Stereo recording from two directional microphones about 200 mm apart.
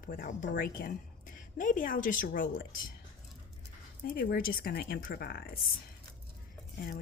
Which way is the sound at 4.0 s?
45° left (ahead or behind).